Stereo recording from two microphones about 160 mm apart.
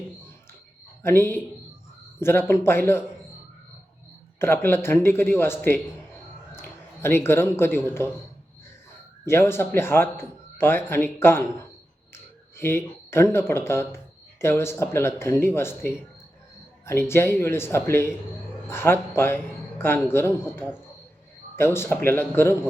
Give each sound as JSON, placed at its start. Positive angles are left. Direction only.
{"t": 1.0, "sound": "speech", "side_deg": 15}
{"t": 4.4, "sound": "speech", "side_deg": 15}
{"t": 9.2, "sound": "speech", "side_deg": 15}